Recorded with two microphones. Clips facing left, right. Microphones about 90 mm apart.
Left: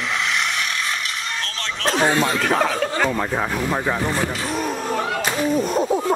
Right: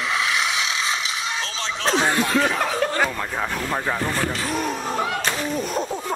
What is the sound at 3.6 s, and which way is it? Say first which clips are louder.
Speech: left 3 dB; 15° left (ahead or behind).